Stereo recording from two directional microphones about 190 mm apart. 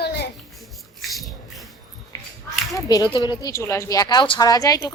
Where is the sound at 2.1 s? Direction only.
20° left (ahead or behind).